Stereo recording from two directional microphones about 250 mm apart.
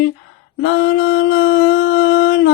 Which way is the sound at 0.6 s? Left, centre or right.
Left.